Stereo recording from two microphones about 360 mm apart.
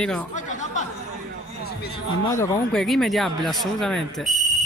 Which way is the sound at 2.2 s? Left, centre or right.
Centre.